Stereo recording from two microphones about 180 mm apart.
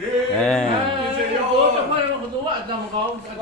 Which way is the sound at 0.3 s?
5° left (ahead or behind).